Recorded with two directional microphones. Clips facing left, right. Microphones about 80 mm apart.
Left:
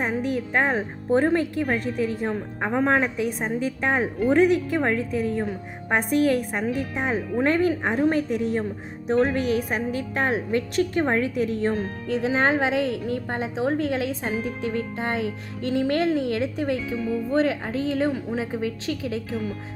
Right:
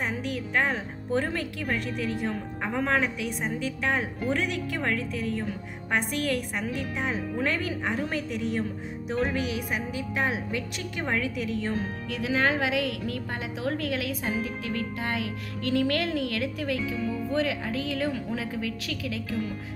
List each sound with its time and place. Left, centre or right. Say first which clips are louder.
0.0 s a woman's voice: left 6 dB; left